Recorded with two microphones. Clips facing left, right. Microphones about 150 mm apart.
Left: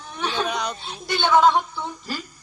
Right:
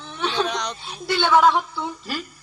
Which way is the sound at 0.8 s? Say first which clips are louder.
Right 4 dB; 20° left (ahead or behind).